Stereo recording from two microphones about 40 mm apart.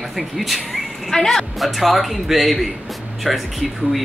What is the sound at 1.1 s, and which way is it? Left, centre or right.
Speech, centre.